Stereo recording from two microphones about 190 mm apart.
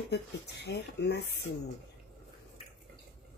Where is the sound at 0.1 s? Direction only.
60° left (ahead or behind).